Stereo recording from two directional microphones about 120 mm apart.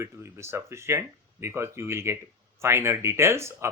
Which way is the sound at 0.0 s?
25° right (ahead or behind).